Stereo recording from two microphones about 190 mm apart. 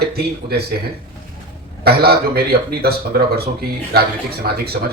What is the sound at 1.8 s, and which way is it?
Speech, 55° right (ahead or behind).